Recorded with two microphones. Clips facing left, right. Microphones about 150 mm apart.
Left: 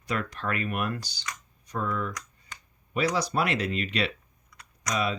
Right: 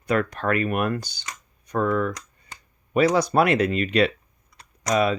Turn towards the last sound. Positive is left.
turn(degrees=-55)  # may be behind; listen again after turning